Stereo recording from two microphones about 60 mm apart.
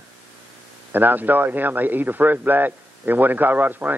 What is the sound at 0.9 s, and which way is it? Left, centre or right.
Speech, right.